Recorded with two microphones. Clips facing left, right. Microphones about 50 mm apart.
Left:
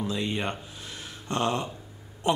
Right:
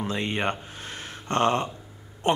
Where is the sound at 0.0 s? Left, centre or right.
Right.